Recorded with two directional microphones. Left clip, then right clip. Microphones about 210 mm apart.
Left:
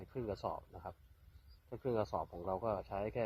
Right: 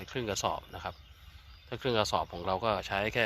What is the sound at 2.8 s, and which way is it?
Speech, 55° right (ahead or behind).